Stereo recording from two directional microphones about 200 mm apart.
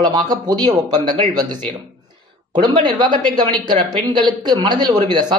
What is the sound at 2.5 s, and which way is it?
Speech, 20° right (ahead or behind).